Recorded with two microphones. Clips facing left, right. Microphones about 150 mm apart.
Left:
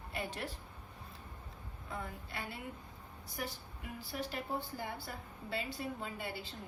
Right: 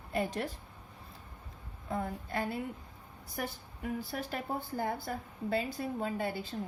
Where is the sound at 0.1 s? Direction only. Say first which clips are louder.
Right 9 dB; 40° right (ahead or behind).